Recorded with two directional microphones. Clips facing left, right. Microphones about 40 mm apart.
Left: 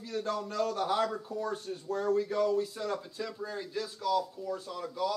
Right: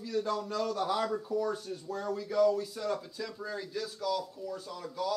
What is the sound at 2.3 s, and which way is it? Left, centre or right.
A man's voice, left.